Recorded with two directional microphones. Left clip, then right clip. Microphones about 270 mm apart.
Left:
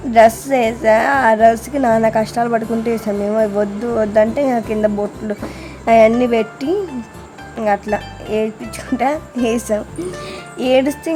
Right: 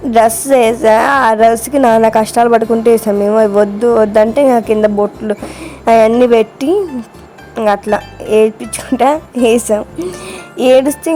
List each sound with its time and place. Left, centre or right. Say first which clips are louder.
0.1 s a woman's voice: right 2 dB; centre